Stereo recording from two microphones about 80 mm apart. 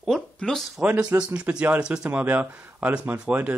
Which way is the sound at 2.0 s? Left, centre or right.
Right.